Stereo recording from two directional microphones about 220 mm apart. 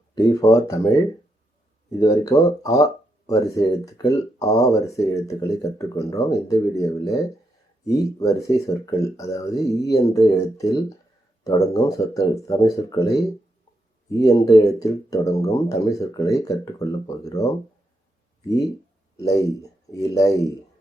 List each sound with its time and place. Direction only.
0.1 s a sound: 15° left (ahead or behind)
2.0 s speech: 15° left (ahead or behind)
19.9 s speech: 15° left (ahead or behind)